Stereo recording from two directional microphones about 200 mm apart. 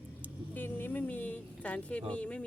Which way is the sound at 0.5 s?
10° left (ahead or behind).